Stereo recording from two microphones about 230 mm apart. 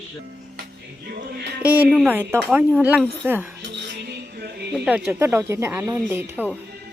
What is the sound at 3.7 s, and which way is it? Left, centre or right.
Music, right.